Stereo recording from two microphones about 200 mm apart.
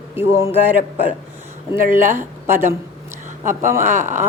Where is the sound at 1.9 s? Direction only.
40° right (ahead or behind).